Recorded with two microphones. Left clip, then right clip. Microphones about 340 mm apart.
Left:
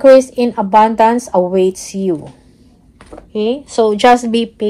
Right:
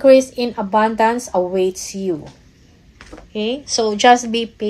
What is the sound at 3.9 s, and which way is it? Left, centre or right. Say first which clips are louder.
Speech: left 1 dB; left.